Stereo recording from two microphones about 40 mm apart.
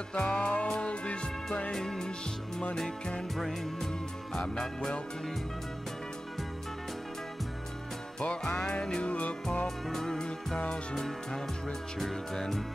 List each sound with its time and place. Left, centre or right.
0.1 s music: left
1.7 s music: centre
3.3 s music: centre
4.4 s music: centre
8.2 s music: left
9.8 s music: centre